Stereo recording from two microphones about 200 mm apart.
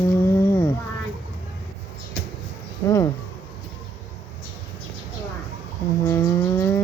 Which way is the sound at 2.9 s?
15° left (ahead or behind).